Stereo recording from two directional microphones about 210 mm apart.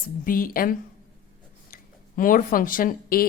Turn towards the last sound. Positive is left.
turn(degrees=40)  # may be behind; listen again after turning